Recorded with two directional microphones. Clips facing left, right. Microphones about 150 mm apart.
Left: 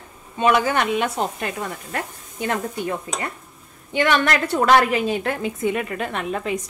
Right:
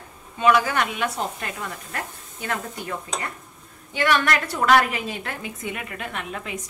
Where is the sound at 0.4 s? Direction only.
25° left (ahead or behind).